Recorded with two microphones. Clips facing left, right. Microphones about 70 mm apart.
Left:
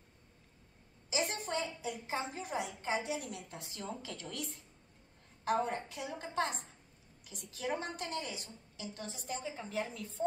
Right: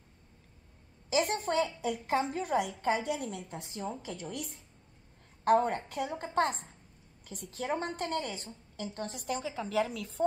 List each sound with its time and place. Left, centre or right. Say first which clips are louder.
1.1 s a woman's voice: right 7 dB; right
3.4 s a woman's voice: right 5 dB; right
5.4 s a woman's voice: right 7 dB; right
9.1 s a woman's voice: right 5 dB; right